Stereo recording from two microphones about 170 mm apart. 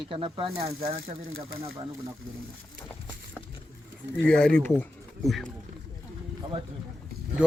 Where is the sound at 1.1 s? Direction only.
55° right (ahead or behind).